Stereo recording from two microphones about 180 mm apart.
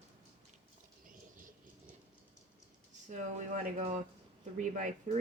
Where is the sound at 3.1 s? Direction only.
45° right (ahead or behind).